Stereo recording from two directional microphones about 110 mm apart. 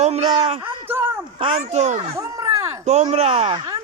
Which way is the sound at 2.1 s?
30° right (ahead or behind).